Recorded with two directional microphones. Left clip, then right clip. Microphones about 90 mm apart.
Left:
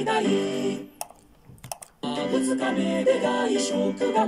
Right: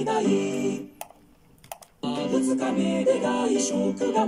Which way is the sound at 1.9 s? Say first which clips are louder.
Even; 15° left (ahead or behind).